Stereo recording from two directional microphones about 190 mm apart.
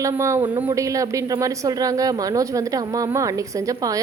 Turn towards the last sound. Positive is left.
turn(degrees=-20)  # may be behind; listen again after turning